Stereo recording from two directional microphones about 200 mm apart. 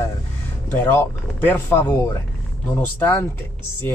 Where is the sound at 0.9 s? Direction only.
10° left (ahead or behind).